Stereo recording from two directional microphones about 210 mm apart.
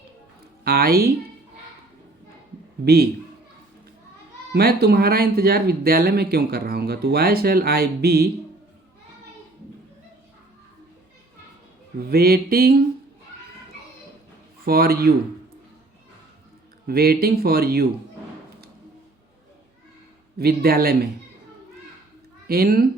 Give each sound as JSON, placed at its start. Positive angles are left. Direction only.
{"t": 0.6, "sound": "speech", "side_deg": -45}
{"t": 2.8, "sound": "speech", "side_deg": -50}
{"t": 4.5, "sound": "speech", "side_deg": -50}
{"t": 12.1, "sound": "speech", "side_deg": -45}
{"t": 14.6, "sound": "speech", "side_deg": -45}
{"t": 16.8, "sound": "speech", "side_deg": -45}
{"t": 20.4, "sound": "speech", "side_deg": -45}
{"t": 22.4, "sound": "speech", "side_deg": -45}